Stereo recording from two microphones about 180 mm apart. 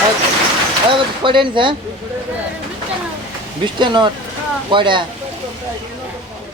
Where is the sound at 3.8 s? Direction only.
25° right (ahead or behind).